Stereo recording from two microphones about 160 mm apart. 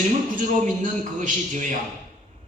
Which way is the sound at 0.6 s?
50° right (ahead or behind).